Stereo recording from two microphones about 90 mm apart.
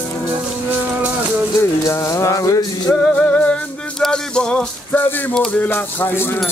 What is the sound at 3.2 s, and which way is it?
Music, 15° left (ahead or behind).